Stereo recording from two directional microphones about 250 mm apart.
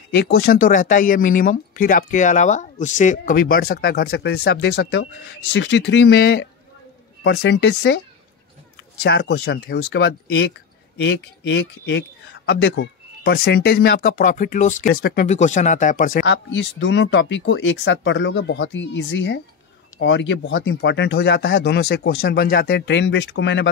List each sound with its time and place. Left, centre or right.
0.1 s speech: left
9.0 s speech: left
16.3 s speech: left